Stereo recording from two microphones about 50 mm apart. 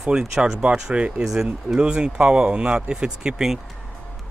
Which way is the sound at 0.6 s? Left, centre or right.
Right.